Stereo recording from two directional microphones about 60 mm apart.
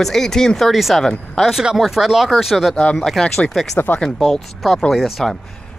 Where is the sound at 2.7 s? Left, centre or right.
Centre.